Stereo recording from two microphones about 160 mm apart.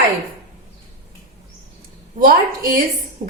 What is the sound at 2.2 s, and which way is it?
Speech, 60° right (ahead or behind).